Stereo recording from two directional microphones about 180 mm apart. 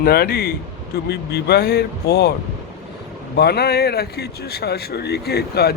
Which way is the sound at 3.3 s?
65° left (ahead or behind).